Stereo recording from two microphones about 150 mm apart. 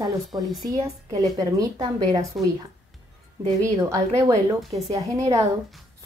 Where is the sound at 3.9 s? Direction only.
20° right (ahead or behind).